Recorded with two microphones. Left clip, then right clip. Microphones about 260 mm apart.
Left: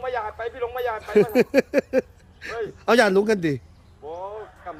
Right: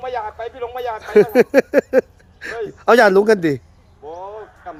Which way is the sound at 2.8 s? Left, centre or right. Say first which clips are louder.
Right 7 dB; centre.